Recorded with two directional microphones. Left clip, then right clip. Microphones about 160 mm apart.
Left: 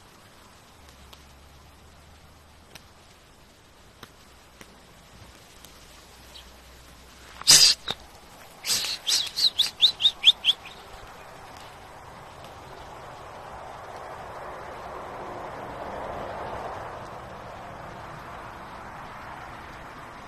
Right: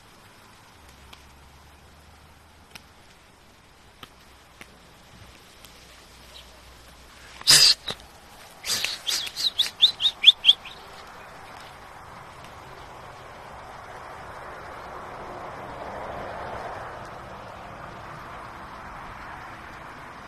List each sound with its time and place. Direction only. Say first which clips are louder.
7.4 s a sound: even; 10° right (ahead or behind)
8.6 s chirp: left 1 dB; 5° right (ahead or behind)
10.2 s chirp: right 6 dB; 20° right (ahead or behind)
13.8 s vehicle: left 1 dB; 35° left (ahead or behind); by 19.0 s 10° left (ahead or behind)